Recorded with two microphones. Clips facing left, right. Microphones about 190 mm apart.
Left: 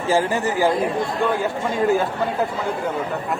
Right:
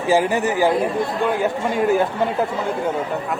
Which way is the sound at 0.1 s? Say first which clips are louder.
Right 2 dB; 15° right (ahead or behind).